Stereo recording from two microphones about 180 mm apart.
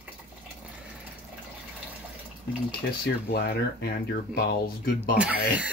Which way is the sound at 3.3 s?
60° left (ahead or behind).